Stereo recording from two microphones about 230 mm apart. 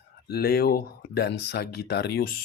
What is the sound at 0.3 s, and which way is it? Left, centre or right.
Speech, left.